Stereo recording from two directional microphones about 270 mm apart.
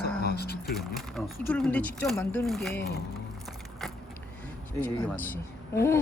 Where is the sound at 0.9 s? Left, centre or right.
Centre.